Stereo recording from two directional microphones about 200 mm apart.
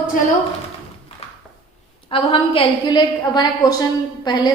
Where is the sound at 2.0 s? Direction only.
25° left (ahead or behind).